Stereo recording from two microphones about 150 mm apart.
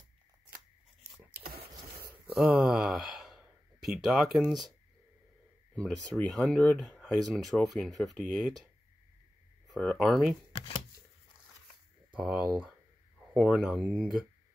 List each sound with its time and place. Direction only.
1.4 s a sound: 85° right
2.3 s speech: 5° right (ahead or behind)
5.8 s speech: 5° left (ahead or behind)
9.8 s speech: centre (ahead or behind)
12.1 s speech: 5° right (ahead or behind)